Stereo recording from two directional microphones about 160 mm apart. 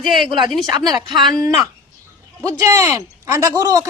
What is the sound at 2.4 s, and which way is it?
A man's voice, 20° right (ahead or behind).